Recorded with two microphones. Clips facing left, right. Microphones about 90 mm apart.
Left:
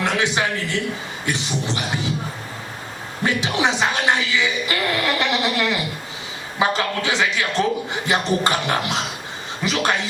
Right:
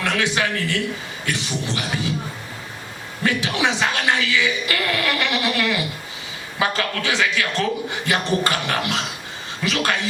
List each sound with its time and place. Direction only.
0.0 s speech: 20° left (ahead or behind)
3.2 s speech: 20° left (ahead or behind)